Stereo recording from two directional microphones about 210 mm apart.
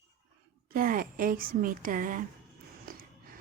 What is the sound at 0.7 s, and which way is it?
A woman's voice, 45° right (ahead or behind).